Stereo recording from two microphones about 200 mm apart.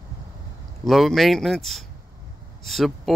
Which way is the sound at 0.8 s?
Centre (ahead or behind).